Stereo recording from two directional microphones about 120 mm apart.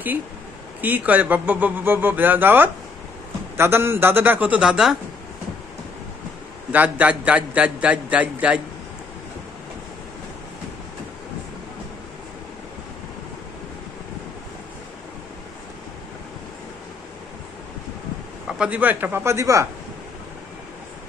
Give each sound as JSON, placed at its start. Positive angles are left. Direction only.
{"t": 0.7, "sound": "speech", "side_deg": -15}
{"t": 6.7, "sound": "speech", "side_deg": -15}
{"t": 18.5, "sound": "speech", "side_deg": -10}